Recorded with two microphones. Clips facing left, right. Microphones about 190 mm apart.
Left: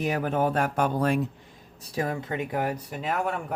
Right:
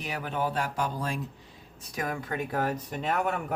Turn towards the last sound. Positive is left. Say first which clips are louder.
# even
turn(degrees=0)  # may be behind; listen again after turning